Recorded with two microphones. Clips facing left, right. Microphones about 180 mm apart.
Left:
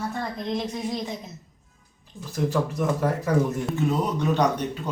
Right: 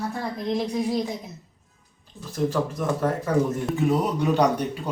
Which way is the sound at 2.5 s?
10° left (ahead or behind).